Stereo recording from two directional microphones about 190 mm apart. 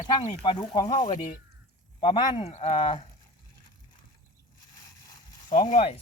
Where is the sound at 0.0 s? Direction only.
25° left (ahead or behind).